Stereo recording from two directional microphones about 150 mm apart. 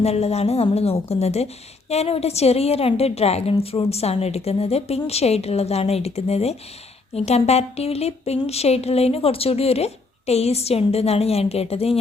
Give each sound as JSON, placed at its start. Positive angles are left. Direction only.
{"t": 0.0, "sound": "a woman's voice", "side_deg": 45}